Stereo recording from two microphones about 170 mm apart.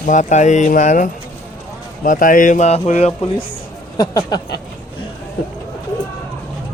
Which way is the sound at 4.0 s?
20° left (ahead or behind).